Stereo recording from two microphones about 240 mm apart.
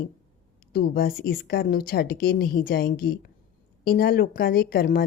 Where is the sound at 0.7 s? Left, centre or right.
Left.